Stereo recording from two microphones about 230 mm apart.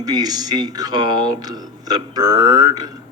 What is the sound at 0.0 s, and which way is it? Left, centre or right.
Speech, centre.